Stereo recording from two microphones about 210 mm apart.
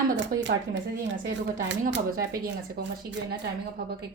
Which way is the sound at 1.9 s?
45° right (ahead or behind).